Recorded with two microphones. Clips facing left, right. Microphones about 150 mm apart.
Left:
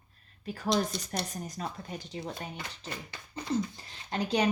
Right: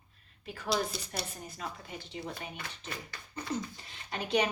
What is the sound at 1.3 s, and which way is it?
Speech, 40° left (ahead or behind).